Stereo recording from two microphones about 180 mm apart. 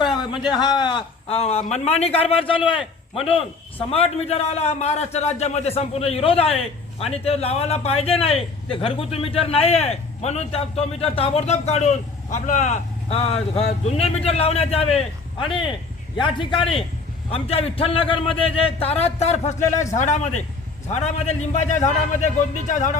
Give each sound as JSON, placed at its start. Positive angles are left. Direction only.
{"t": 0.6, "sound": "a man's voice", "side_deg": 25}